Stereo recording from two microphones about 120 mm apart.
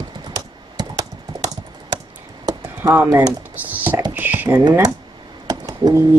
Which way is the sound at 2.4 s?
30° right (ahead or behind).